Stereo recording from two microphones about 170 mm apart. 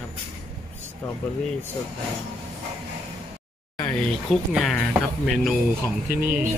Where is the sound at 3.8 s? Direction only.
5° left (ahead or behind).